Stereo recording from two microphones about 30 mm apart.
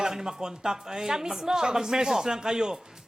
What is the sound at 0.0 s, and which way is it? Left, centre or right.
Speech, centre.